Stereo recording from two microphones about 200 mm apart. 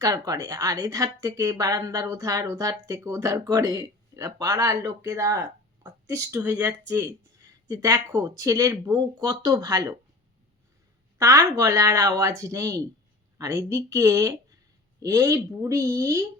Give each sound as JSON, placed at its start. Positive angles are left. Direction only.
{"t": 0.0, "sound": "speech", "side_deg": -15}
{"t": 11.2, "sound": "speech", "side_deg": -15}